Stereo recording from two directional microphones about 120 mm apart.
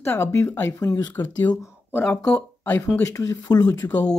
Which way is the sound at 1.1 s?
15° left (ahead or behind).